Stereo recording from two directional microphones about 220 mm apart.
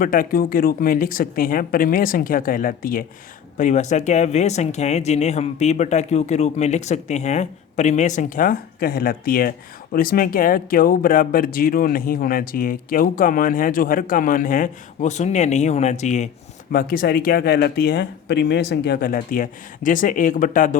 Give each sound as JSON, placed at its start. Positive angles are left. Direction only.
{"t": 0.0, "sound": "speech", "side_deg": 40}